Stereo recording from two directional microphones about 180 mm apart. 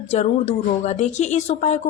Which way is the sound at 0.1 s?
35° left (ahead or behind).